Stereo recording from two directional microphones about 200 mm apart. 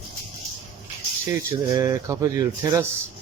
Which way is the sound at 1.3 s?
15° right (ahead or behind).